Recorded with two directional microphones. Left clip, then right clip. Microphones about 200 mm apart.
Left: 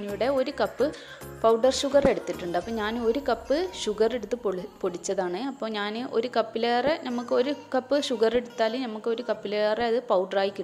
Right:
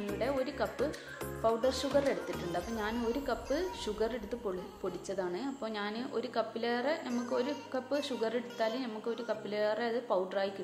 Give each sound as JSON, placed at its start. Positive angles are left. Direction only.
{"t": 0.2, "sound": "a woman's voice", "side_deg": 40}